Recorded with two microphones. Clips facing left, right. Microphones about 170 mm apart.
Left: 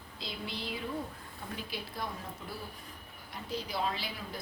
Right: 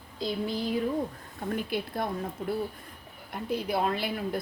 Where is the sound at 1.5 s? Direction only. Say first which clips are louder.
Right 11 dB; 55° right (ahead or behind).